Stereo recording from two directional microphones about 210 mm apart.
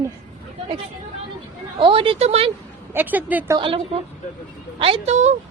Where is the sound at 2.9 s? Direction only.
10° right (ahead or behind).